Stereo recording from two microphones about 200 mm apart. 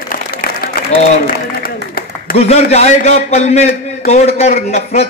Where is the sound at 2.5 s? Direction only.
35° left (ahead or behind).